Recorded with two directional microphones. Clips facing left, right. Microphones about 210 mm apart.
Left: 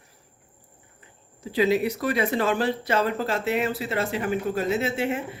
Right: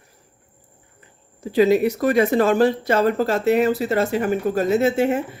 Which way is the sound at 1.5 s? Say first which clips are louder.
Right 6 dB; 45° right (ahead or behind).